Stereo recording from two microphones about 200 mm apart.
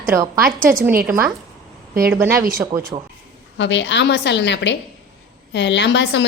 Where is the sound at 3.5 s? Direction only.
65° left (ahead or behind).